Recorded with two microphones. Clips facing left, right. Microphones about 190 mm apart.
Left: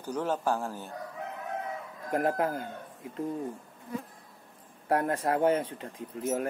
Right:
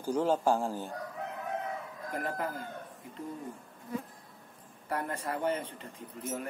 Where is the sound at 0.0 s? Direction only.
10° right (ahead or behind).